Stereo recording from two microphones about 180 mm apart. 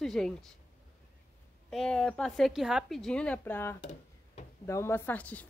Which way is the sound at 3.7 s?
35° left (ahead or behind).